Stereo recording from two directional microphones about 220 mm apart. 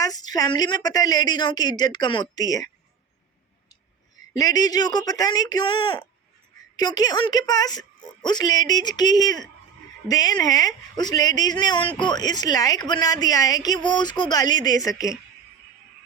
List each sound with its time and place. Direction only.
0.0 s speech: 15° left (ahead or behind)
4.4 s speech: 15° left (ahead or behind)